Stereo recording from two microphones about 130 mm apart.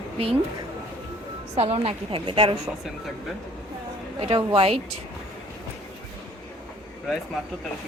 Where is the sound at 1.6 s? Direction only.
50° right (ahead or behind).